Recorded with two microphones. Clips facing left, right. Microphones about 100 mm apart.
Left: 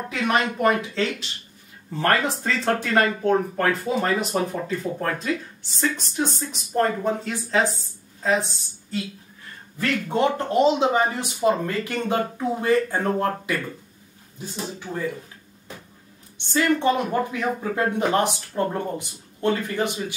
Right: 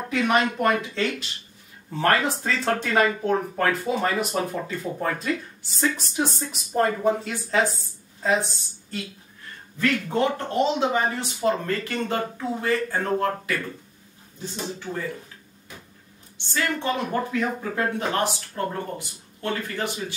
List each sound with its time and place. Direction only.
0.1 s speech: centre (ahead or behind)
9.8 s speech: 25° left (ahead or behind)
16.5 s speech: 15° left (ahead or behind)